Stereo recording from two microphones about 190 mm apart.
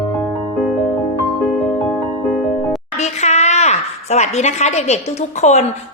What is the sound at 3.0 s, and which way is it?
A woman's voice, 35° left (ahead or behind).